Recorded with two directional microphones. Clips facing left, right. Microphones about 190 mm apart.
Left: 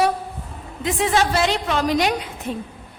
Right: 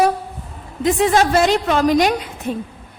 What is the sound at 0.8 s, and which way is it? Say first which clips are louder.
A woman's voice: right 5 dB; 45° right (ahead or behind).